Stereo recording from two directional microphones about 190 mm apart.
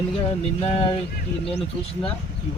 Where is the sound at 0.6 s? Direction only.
30° left (ahead or behind).